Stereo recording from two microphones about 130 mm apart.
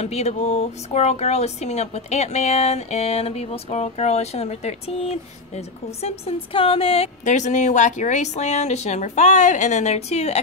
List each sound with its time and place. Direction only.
0.0 s speech: 60° left (ahead or behind)
7.2 s speech: 65° left (ahead or behind)